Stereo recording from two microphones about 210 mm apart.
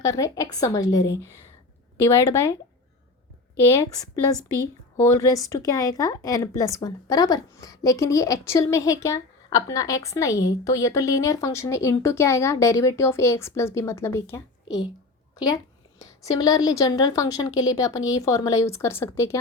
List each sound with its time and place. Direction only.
0.0 s speech: 15° left (ahead or behind)
3.6 s speech: 15° left (ahead or behind)
16.0 s speech: 15° left (ahead or behind)